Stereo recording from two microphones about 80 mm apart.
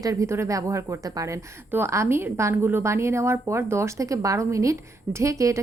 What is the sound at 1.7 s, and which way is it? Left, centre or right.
Speech, right.